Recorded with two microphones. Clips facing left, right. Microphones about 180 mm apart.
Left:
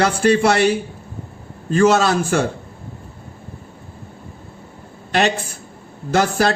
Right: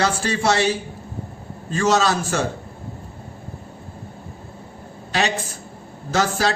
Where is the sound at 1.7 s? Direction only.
55° left (ahead or behind).